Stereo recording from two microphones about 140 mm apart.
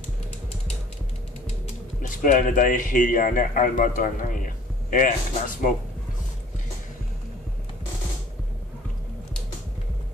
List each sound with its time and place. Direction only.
2.0 s a man's voice: 70° left (ahead or behind)